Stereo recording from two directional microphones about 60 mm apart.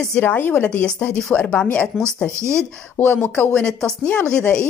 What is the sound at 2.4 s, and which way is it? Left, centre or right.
Speech, right.